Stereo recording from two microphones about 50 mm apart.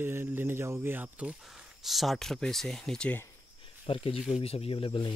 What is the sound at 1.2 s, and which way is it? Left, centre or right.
Speech, right.